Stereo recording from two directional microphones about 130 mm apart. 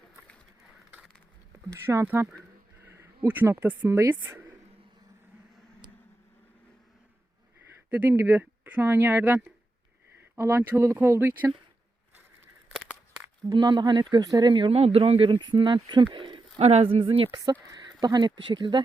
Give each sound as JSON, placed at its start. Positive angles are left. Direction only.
{"t": 1.7, "sound": "speech", "side_deg": -25}
{"t": 2.0, "sound": "speech", "side_deg": -15}
{"t": 2.8, "sound": "a sound", "side_deg": -20}
{"t": 3.2, "sound": "speech", "side_deg": -15}
{"t": 7.9, "sound": "speech", "side_deg": -15}
{"t": 13.5, "sound": "speech", "side_deg": -35}
{"t": 14.8, "sound": "speech", "side_deg": -50}
{"t": 16.1, "sound": "a sound", "side_deg": -40}
{"t": 16.6, "sound": "speech", "side_deg": -50}
{"t": 17.3, "sound": "speech", "side_deg": -30}